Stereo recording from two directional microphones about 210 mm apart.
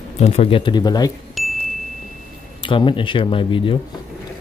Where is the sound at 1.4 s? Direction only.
Centre (ahead or behind).